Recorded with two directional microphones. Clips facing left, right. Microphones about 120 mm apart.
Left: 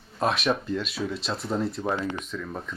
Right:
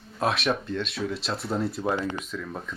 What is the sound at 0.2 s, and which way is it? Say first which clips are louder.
Speech: left 1 dB; centre (ahead or behind).